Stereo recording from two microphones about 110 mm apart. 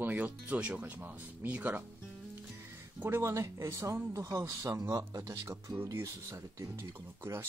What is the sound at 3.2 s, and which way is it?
Speech, 30° right (ahead or behind).